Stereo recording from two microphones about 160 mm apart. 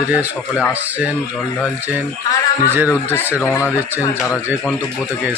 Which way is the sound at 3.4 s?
15° left (ahead or behind).